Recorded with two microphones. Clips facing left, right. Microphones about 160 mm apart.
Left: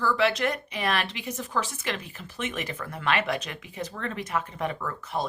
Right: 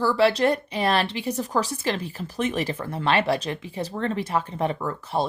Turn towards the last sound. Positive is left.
turn(degrees=-30)  # may be behind; listen again after turning